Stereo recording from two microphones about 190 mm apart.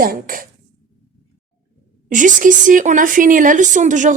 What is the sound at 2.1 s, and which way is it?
A woman's voice, 45° right (ahead or behind).